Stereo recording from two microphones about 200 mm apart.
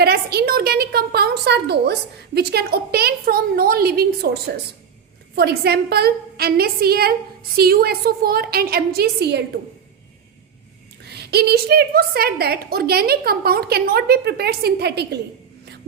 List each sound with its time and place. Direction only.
0.0 s a woman's voice: 50° right (ahead or behind)
11.0 s a woman's voice: 55° right (ahead or behind)